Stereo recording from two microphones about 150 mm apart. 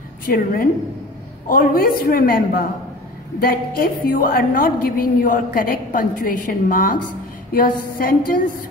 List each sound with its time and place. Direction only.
0.3 s a woman's voice: 75° left (ahead or behind)
1.5 s a woman's voice: 75° left (ahead or behind)